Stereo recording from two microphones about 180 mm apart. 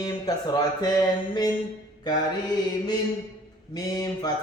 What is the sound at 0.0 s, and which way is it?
Speech, 20° left (ahead or behind).